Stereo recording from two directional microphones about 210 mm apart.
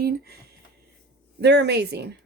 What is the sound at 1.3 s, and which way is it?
Speech, 55° right (ahead or behind).